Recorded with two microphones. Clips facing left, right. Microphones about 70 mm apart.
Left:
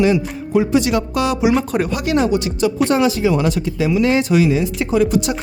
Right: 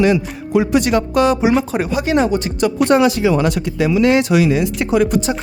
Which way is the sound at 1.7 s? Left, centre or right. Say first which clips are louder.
Right 1 dB; right.